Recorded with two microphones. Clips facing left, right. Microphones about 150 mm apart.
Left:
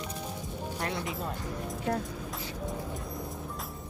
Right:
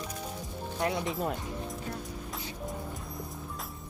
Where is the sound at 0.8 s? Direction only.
15° right (ahead or behind).